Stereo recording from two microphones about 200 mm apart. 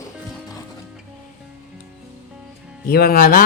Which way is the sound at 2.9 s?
50° left (ahead or behind).